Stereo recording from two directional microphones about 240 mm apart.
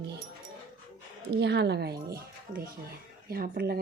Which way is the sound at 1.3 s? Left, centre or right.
Right.